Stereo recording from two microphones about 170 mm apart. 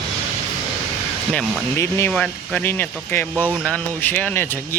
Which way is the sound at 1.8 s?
15° left (ahead or behind).